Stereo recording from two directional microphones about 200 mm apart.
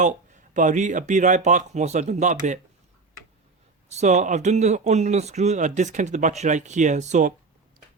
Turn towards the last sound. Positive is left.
turn(degrees=-35)  # may be behind; listen again after turning